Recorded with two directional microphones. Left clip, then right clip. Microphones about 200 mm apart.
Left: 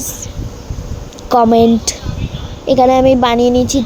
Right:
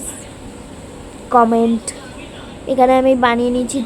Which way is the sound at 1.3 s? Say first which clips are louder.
Left 3 dB; 30° left (ahead or behind).